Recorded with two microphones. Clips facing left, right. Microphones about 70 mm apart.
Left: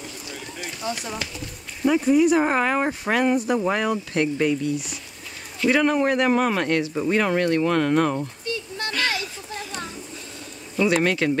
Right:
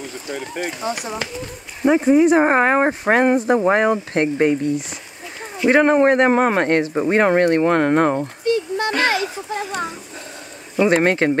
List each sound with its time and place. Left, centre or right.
0.3 s speech: right